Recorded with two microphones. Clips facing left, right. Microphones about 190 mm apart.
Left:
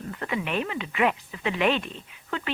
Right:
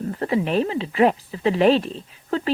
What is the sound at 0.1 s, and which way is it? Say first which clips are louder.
Speech: right 7 dB; 35° right (ahead or behind).